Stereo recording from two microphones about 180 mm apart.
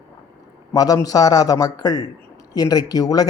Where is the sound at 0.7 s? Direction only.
20° left (ahead or behind).